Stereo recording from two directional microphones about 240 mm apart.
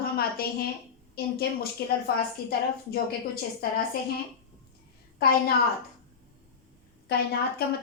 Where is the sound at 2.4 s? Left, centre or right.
Left.